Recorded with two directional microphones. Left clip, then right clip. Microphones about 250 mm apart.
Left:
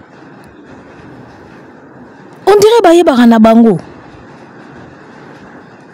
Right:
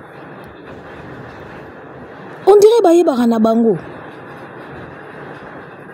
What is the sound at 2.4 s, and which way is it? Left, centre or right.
Speech, left.